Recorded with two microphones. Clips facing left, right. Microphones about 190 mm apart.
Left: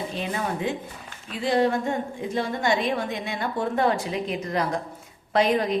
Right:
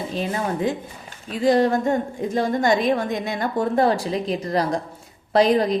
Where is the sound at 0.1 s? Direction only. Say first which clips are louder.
Right 4 dB; 40° right (ahead or behind).